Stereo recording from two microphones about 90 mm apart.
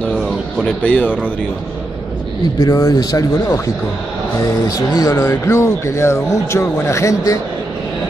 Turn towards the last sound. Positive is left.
turn(degrees=35)  # may be behind; listen again after turning